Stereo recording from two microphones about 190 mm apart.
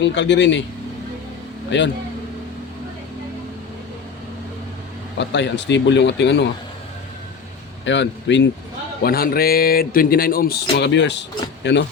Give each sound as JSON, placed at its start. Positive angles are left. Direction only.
{"t": 0.0, "sound": "speech", "side_deg": 70}
{"t": 1.7, "sound": "speech", "side_deg": 70}
{"t": 5.3, "sound": "speech", "side_deg": 70}
{"t": 7.9, "sound": "speech", "side_deg": 70}
{"t": 9.0, "sound": "speech", "side_deg": 50}